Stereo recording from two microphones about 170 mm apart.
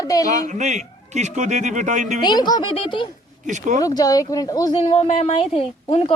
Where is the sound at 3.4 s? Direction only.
45° right (ahead or behind).